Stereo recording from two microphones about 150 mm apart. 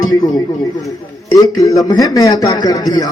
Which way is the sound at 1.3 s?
20° left (ahead or behind).